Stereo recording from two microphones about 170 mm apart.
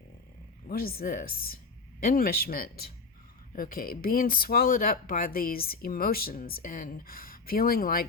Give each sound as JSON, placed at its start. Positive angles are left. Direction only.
{"t": 0.7, "sound": "speech", "side_deg": 60}